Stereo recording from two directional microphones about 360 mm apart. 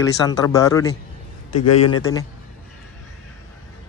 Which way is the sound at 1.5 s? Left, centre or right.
Left.